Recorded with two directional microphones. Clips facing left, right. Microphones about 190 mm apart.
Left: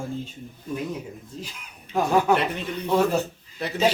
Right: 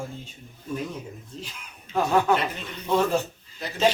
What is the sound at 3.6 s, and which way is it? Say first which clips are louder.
Speech: left 5 dB; 60° left (ahead or behind).